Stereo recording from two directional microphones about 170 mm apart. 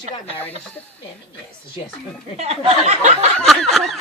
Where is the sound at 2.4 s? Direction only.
40° right (ahead or behind).